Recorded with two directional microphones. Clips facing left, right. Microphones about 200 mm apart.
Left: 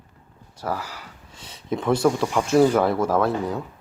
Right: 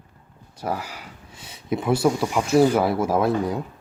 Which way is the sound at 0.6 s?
15° right (ahead or behind).